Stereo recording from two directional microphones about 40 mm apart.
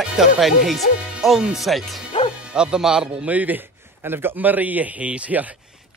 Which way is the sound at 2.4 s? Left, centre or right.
Right.